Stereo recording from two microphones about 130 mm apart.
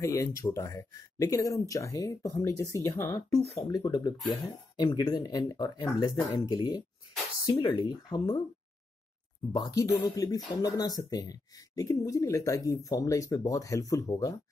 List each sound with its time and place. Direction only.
0.0 s speech: 25° left (ahead or behind)
3.6 s speech: 35° left (ahead or behind)
9.5 s speech: 30° left (ahead or behind)